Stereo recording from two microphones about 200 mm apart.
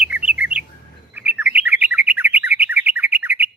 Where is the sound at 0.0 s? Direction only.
5° right (ahead or behind).